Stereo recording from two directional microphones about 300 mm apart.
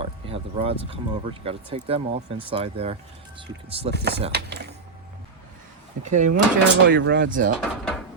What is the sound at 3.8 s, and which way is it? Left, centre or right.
Speech, right.